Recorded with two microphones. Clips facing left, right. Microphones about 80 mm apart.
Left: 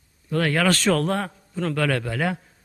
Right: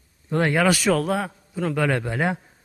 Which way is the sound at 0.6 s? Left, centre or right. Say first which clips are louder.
Right 1 dB; centre.